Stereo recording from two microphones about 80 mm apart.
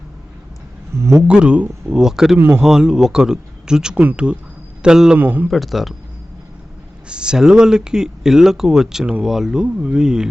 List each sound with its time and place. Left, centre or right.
0.9 s speech: right
1.3 s speech: centre
5.1 s speech: right
5.5 s speech: centre
7.1 s speech: centre